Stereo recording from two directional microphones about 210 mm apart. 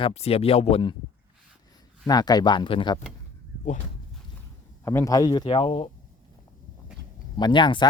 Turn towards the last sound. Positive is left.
turn(degrees=20)  # may be behind; listen again after turning